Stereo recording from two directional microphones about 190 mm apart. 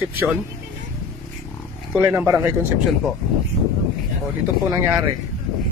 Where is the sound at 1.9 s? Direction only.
5° right (ahead or behind).